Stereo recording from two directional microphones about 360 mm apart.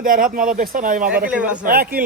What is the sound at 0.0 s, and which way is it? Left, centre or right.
Speech, right.